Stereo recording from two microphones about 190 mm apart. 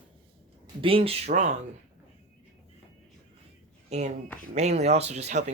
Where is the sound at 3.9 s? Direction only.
35° right (ahead or behind).